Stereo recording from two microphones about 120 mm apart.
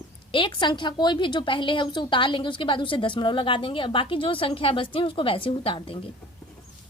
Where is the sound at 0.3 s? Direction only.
45° left (ahead or behind).